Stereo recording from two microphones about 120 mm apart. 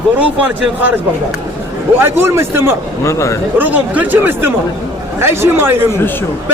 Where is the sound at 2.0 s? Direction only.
20° right (ahead or behind).